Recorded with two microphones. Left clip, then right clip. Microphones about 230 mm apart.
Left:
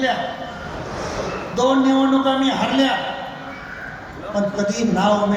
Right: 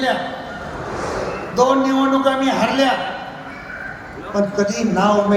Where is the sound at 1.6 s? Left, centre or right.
Right.